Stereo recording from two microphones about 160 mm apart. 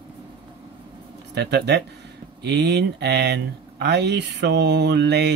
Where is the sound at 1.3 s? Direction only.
90° right.